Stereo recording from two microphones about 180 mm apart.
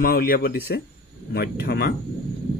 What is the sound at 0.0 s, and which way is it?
Speech, 55° left (ahead or behind).